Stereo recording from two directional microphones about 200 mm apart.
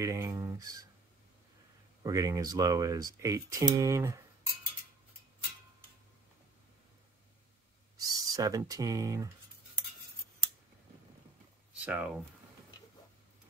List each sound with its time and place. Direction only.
0.0 s speech: 15° right (ahead or behind)
2.0 s speech: 15° right (ahead or behind)
8.0 s speech: 20° right (ahead or behind)
11.8 s speech: 5° right (ahead or behind)